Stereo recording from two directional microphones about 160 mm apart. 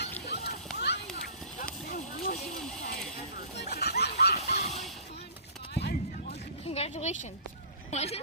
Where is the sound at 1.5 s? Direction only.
60° left (ahead or behind).